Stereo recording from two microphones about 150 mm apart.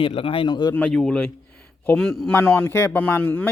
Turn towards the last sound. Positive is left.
turn(degrees=15)  # may be behind; listen again after turning